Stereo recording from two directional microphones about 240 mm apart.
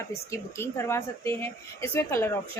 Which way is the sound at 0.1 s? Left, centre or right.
Centre.